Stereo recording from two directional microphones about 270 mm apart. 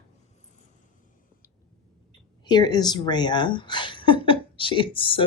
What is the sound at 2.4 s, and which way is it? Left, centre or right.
A woman's voice, centre.